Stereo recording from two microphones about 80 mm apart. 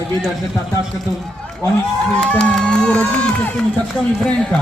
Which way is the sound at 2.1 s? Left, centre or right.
Centre.